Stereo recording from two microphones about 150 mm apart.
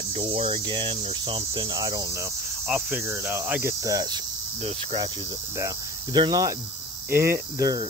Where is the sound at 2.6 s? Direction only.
10° right (ahead or behind).